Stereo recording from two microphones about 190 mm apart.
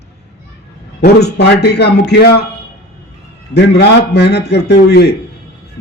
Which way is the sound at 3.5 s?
60° left (ahead or behind).